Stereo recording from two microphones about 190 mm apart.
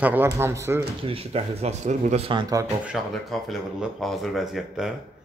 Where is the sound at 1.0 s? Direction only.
30° right (ahead or behind).